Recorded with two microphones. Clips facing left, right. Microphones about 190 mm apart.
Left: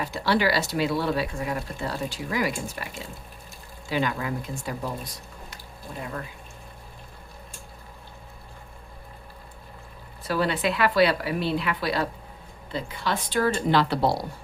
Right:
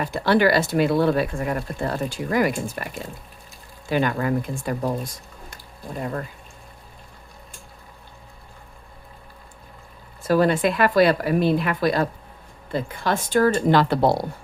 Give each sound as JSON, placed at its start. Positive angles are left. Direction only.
{"t": 0.0, "sound": "speech", "side_deg": -55}
{"t": 10.2, "sound": "speech", "side_deg": -45}